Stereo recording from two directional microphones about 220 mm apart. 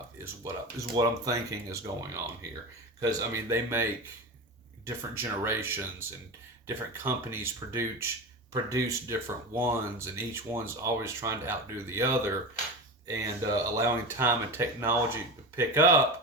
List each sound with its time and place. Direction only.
0.4 s speech: 15° right (ahead or behind)
4.9 s speech: 10° right (ahead or behind)